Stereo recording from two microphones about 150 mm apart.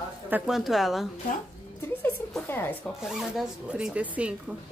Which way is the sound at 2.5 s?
15° left (ahead or behind).